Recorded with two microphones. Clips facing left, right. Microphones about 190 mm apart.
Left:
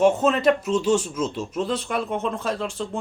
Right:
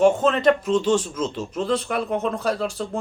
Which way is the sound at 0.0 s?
5° left (ahead or behind).